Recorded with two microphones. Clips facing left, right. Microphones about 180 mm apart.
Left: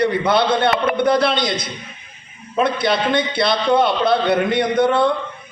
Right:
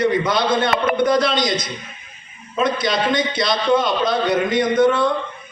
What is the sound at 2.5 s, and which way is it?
A man's voice, 60° left (ahead or behind).